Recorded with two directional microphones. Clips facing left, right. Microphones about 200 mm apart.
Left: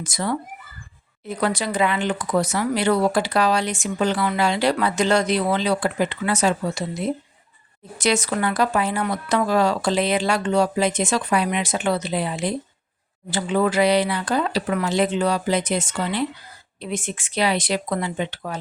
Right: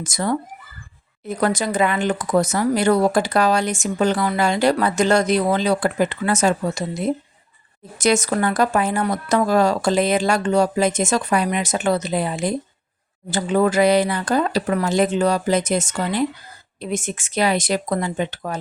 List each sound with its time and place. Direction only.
0.0 s speech: 45° right (ahead or behind)